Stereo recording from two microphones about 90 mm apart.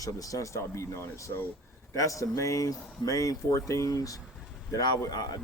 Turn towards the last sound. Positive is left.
turn(degrees=45)  # may be behind; listen again after turning